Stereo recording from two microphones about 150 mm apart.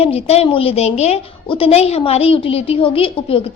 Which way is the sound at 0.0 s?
40° left (ahead or behind).